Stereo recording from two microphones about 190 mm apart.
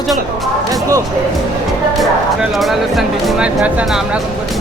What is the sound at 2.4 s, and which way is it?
Speech, centre (ahead or behind).